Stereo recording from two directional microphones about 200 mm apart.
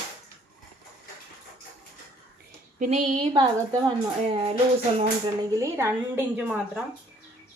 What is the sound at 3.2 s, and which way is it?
Speech, 20° right (ahead or behind).